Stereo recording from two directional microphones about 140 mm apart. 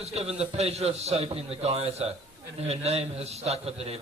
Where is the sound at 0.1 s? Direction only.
45° right (ahead or behind).